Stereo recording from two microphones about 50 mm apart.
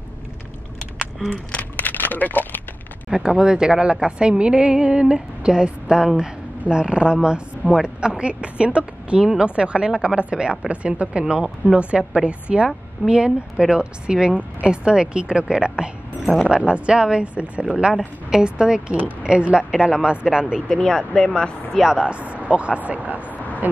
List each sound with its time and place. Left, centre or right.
1.3 s speech: left
1.8 s a sound: left
3.1 s a woman's voice: centre
20.6 s speech: centre
21.8 s a woman's voice: centre
23.2 s vehicle: left